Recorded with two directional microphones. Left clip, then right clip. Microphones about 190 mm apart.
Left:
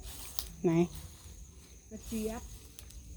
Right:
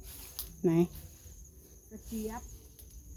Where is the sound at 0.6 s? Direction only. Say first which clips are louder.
Right 1 dB; 25° right (ahead or behind).